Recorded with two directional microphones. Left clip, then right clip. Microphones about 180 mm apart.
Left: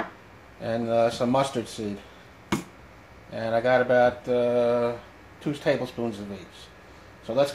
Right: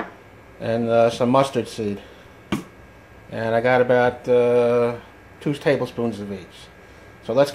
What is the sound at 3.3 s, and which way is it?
Mantra, 30° right (ahead or behind).